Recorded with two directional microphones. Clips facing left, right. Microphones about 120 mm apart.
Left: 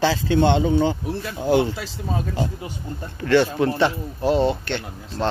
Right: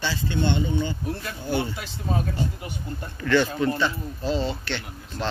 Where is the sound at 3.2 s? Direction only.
60° left (ahead or behind).